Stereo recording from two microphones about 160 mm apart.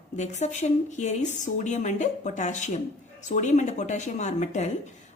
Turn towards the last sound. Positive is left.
turn(degrees=45)  # may be behind; listen again after turning